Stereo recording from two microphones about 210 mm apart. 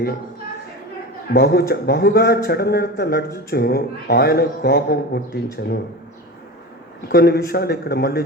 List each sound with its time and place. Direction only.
1.3 s a man's voice: 50° left (ahead or behind)
7.1 s a man's voice: 50° left (ahead or behind)